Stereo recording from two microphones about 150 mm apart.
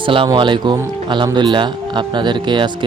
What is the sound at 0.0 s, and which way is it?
Speech, 35° right (ahead or behind).